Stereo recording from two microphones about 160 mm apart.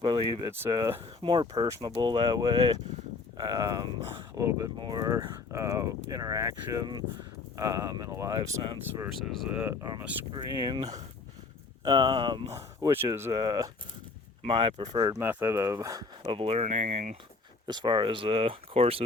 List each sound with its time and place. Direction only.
0.0 s speech: 30° right (ahead or behind)
0.5 s speech: 15° right (ahead or behind)
1.2 s speech: 30° right (ahead or behind)
8.4 s speech: 35° right (ahead or behind)
9.1 s speech: centre (ahead or behind)
10.3 s speech: 30° right (ahead or behind)
12.8 s speech: 20° right (ahead or behind)
13.3 s speech: 25° right (ahead or behind)
16.3 s speech: 35° right (ahead or behind)
17.7 s speech: 25° right (ahead or behind)